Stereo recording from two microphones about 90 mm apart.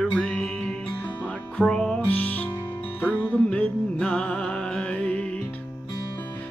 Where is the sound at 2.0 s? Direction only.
15° left (ahead or behind).